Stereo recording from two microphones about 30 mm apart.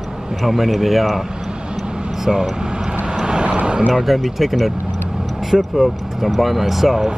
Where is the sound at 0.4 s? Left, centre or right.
Centre.